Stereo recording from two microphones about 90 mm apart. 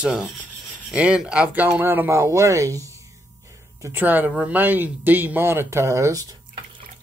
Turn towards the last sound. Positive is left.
turn(degrees=-40)  # may be behind; listen again after turning